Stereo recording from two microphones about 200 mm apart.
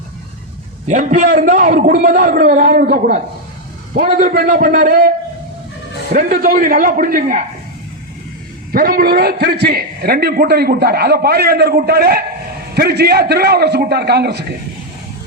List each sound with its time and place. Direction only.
0.9 s a man's voice: 40° right (ahead or behind)
8.7 s a man's voice: 45° right (ahead or behind)